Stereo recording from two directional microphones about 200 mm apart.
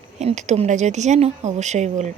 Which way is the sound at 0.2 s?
35° right (ahead or behind).